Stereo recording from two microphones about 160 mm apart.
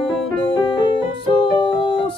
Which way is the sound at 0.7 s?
30° left (ahead or behind).